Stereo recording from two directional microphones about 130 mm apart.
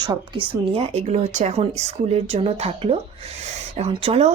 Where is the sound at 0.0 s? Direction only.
40° right (ahead or behind).